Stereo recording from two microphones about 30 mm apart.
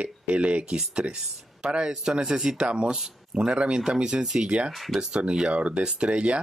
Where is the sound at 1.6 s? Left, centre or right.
Right.